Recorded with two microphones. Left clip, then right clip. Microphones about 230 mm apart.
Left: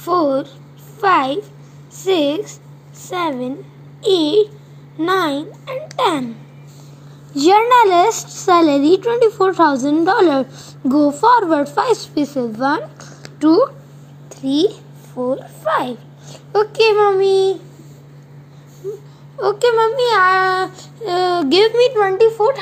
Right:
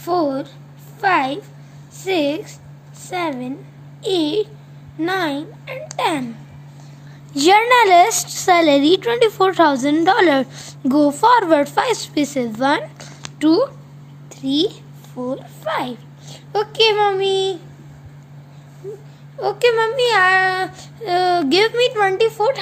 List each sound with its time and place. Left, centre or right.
0.0 s speech: centre
7.3 s speech: centre
12.6 s a sound: centre
14.3 s a child's voice: centre
19.4 s speech: centre